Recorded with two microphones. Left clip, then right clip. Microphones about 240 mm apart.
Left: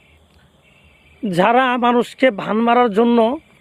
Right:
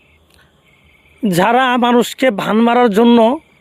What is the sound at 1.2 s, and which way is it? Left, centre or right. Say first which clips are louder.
Speech: right 2 dB; right.